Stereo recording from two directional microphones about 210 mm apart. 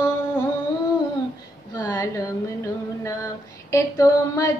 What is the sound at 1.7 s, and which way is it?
Speech, 20° left (ahead or behind).